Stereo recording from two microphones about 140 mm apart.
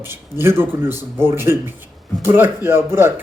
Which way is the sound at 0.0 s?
15° right (ahead or behind).